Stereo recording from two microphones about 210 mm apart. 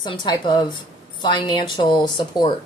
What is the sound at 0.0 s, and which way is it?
Speech, 20° left (ahead or behind).